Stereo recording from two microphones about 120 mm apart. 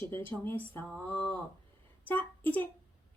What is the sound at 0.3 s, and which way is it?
A woman's voice, 15° left (ahead or behind).